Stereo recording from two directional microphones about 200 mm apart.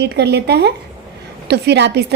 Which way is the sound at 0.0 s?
55° right (ahead or behind).